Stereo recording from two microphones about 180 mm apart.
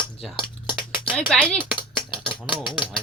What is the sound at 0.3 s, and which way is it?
Cutlery, 25° left (ahead or behind).